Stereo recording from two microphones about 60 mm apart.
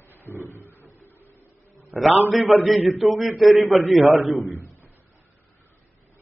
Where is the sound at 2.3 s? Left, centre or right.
Centre.